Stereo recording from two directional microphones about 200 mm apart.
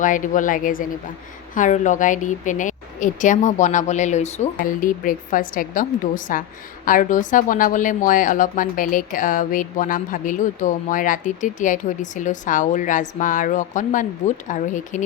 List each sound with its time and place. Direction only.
0.0 s a woman's voice: 40° left (ahead or behind)